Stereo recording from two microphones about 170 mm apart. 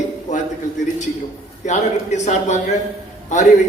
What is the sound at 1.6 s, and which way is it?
Speech, 45° left (ahead or behind).